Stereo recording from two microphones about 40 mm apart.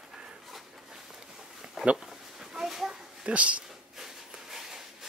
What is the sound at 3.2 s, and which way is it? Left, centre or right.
Speech, right.